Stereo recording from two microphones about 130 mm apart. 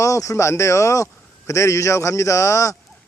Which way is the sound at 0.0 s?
25° left (ahead or behind).